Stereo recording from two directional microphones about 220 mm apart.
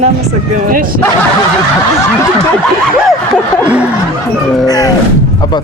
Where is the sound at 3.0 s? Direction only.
5° left (ahead or behind).